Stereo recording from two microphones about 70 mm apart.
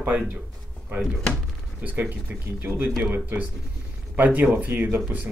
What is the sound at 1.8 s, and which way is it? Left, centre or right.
Speech, right.